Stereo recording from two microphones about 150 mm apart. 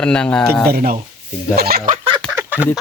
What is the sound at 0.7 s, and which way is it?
Speech, 75° right (ahead or behind).